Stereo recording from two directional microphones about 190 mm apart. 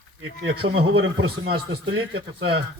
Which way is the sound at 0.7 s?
85° right.